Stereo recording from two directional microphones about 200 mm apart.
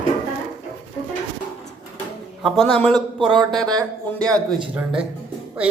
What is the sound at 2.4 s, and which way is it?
A man's voice, centre (ahead or behind).